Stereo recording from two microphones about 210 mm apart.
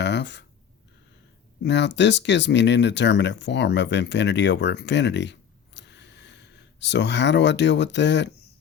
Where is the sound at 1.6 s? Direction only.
55° left (ahead or behind).